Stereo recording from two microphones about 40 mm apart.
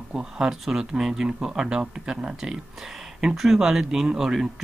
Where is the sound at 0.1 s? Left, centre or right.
Centre.